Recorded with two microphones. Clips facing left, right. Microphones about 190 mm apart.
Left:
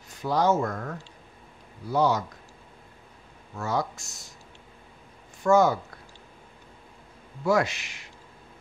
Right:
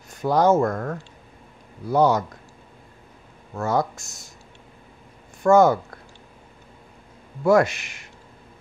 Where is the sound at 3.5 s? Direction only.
50° right (ahead or behind).